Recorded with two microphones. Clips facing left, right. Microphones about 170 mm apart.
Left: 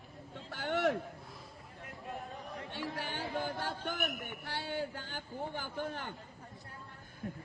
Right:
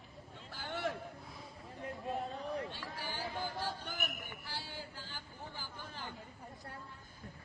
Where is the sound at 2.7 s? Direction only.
60° left (ahead or behind).